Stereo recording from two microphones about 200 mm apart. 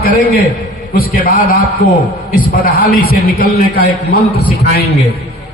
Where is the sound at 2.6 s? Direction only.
50° left (ahead or behind).